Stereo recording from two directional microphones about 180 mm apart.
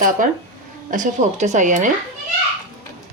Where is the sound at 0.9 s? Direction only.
45° right (ahead or behind).